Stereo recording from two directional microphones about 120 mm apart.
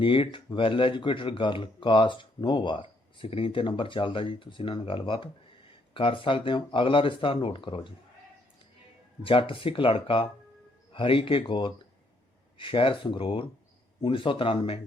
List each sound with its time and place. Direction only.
0.0 s speech: 45° left (ahead or behind)
9.2 s speech: 50° left (ahead or behind)